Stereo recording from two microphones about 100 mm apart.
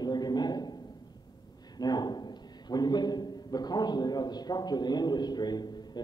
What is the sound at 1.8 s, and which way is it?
A man's voice, 45° left (ahead or behind).